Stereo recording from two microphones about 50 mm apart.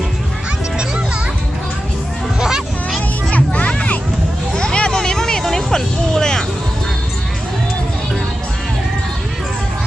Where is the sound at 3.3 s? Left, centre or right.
Left.